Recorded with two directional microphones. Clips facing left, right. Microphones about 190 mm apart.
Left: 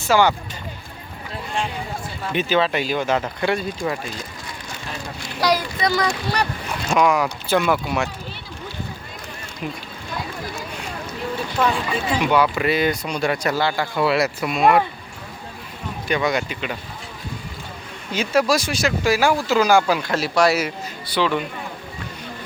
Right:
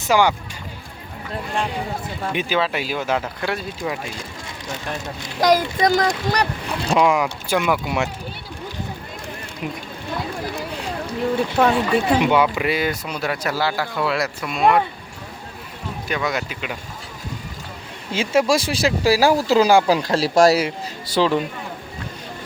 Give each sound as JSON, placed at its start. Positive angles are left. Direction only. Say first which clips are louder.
{"t": 0.0, "sound": "speech", "louder": "even", "side_deg": -15}
{"t": 2.3, "sound": "speech", "louder": "left 3 dB", "side_deg": -10}
{"t": 5.4, "sound": "speech", "louder": "right 4 dB", "side_deg": -45}
{"t": 6.8, "sound": "speech", "louder": "right 1 dB", "side_deg": -25}
{"t": 10.5, "sound": "a sound", "louder": "right 4 dB", "side_deg": -30}
{"t": 11.6, "sound": "speech", "louder": "right 3 dB", "side_deg": -60}
{"t": 12.2, "sound": "speech", "louder": "left 3 dB", "side_deg": -20}
{"t": 12.5, "sound": "speech", "louder": "left 2 dB", "side_deg": -10}
{"t": 16.0, "sound": "speech", "louder": "left 3 dB", "side_deg": 0}
{"t": 18.1, "sound": "speech", "louder": "right 1 dB", "side_deg": -25}